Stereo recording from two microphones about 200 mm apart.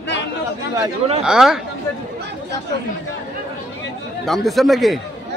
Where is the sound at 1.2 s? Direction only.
5° right (ahead or behind).